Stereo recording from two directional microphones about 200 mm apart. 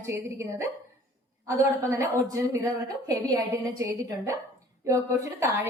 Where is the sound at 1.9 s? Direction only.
15° right (ahead or behind).